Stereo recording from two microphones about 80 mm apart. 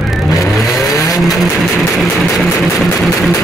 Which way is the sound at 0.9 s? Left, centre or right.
Left.